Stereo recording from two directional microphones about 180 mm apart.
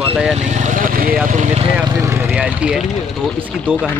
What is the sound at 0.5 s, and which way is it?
Speech, 50° right (ahead or behind).